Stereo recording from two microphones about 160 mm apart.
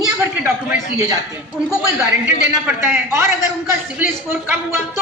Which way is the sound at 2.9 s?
15° right (ahead or behind).